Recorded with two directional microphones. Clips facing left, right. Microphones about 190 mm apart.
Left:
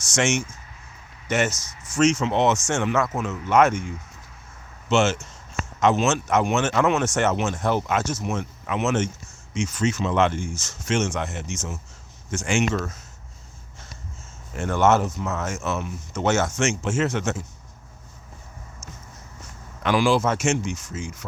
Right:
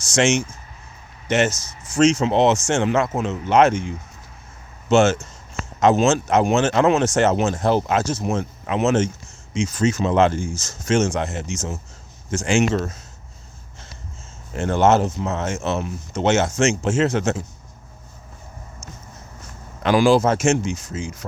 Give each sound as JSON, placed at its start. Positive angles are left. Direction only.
{"t": 0.0, "sound": "speech", "side_deg": -35}
{"t": 4.9, "sound": "speech", "side_deg": -45}
{"t": 14.5, "sound": "speech", "side_deg": -30}
{"t": 19.8, "sound": "speech", "side_deg": -40}